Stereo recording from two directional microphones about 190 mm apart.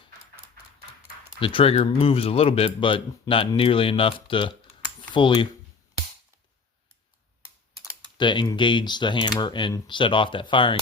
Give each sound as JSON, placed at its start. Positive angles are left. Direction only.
{"t": 1.4, "sound": "a man's voice", "side_deg": 30}
{"t": 7.8, "sound": "a man's voice", "side_deg": 25}